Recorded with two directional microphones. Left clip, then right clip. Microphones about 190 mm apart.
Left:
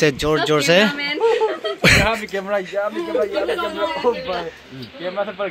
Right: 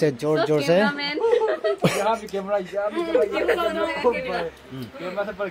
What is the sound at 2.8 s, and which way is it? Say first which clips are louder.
Speech: left 4 dB; 35° left (ahead or behind).